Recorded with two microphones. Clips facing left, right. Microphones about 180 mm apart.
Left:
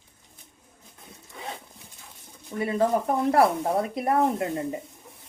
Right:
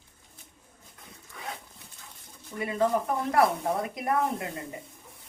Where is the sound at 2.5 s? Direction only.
35° left (ahead or behind).